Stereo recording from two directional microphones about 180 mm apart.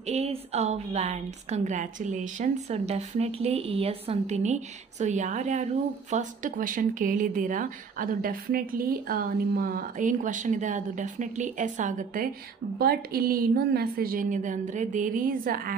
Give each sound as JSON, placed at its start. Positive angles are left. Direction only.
{"t": 0.1, "sound": "a woman's voice", "side_deg": -35}
{"t": 12.7, "sound": "speech", "side_deg": -60}